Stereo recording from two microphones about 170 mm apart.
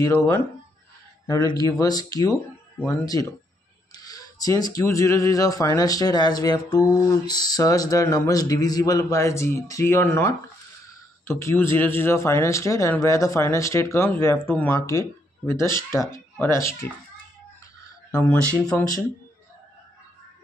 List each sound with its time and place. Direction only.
1.2 s speech: 20° left (ahead or behind)
18.1 s speech: 10° left (ahead or behind)